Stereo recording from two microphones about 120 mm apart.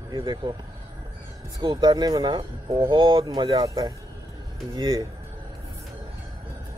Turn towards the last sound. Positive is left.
turn(degrees=-35)  # may be behind; listen again after turning